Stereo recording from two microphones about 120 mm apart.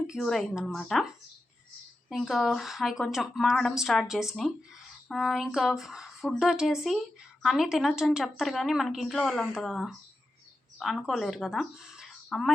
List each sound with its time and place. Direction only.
0.1 s speech: centre (ahead or behind)
2.1 s speech: centre (ahead or behind)